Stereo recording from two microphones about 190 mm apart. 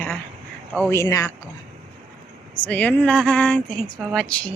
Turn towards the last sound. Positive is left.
turn(degrees=5)  # may be behind; listen again after turning